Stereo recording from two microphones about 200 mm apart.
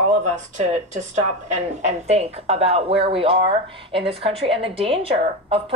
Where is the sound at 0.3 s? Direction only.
35° right (ahead or behind).